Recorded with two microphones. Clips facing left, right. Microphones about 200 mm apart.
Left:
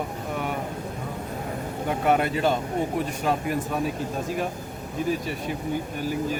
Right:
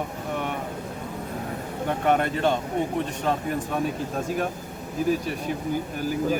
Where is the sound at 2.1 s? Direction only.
5° left (ahead or behind).